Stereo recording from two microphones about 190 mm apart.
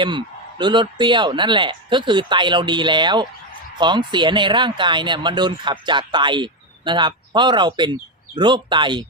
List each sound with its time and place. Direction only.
0.0 s speech: 25° right (ahead or behind)